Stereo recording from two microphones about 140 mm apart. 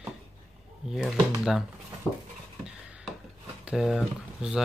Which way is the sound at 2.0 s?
10° left (ahead or behind).